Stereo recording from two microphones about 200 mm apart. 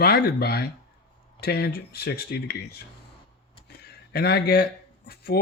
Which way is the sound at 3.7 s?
50° left (ahead or behind).